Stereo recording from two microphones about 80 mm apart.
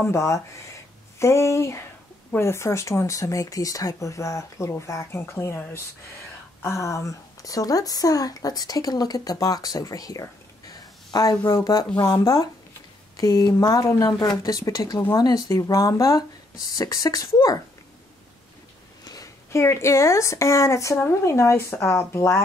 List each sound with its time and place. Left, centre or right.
0.0 s speech: left
6.6 s speech: left
10.7 s a sound: left
12.1 s speech: left
19.5 s speech: left